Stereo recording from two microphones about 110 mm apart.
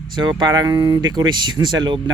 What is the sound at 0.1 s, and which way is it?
Speech, 45° right (ahead or behind).